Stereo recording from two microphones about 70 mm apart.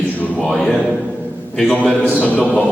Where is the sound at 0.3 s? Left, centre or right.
Centre.